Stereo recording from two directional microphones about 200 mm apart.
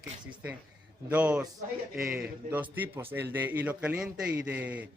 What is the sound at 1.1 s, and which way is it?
Speech, 5° right (ahead or behind).